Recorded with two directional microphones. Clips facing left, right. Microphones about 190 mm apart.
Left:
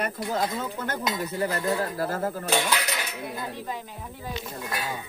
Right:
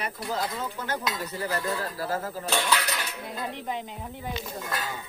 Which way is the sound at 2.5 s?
15° left (ahead or behind).